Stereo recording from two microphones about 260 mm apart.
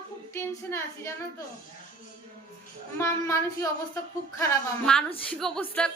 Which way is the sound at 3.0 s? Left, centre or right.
Centre.